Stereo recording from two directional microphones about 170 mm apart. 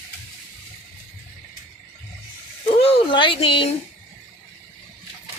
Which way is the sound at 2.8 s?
30° left (ahead or behind).